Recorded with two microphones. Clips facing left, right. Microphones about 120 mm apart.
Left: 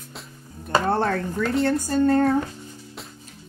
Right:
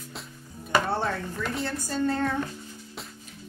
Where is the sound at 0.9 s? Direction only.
55° left (ahead or behind).